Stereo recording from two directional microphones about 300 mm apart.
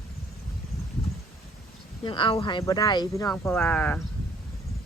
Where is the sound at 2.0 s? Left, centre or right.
Centre.